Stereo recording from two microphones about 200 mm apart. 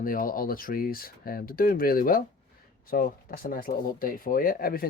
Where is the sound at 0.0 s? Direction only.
45° left (ahead or behind).